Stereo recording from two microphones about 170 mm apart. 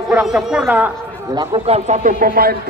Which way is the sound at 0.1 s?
5° right (ahead or behind).